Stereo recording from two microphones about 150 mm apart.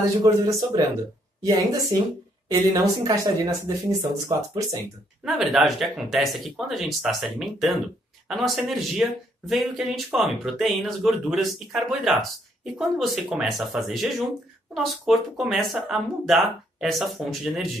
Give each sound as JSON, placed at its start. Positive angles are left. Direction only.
{"t": 0.2, "sound": "speech", "side_deg": -25}
{"t": 5.2, "sound": "speech", "side_deg": 0}